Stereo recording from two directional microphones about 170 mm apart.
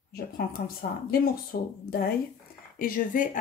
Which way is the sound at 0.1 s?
65° left (ahead or behind).